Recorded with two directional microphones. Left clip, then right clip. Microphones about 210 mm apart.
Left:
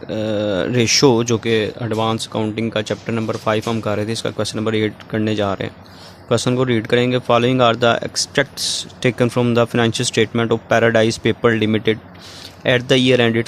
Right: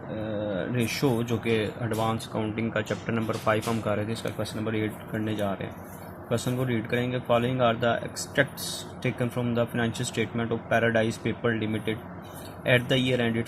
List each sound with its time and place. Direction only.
0.3 s speech: 40° left (ahead or behind)